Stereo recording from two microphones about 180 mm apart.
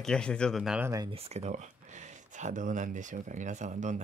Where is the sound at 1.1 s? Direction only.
35° right (ahead or behind).